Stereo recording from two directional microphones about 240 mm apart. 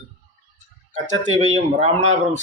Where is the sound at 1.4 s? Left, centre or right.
Right.